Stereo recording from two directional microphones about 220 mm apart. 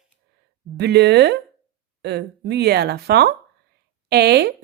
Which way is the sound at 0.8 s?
50° right (ahead or behind).